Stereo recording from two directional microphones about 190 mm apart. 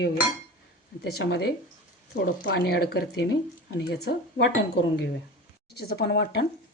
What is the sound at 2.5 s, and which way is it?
Speech, 60° left (ahead or behind).